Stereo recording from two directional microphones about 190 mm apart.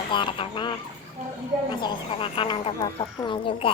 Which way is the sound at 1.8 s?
25° left (ahead or behind).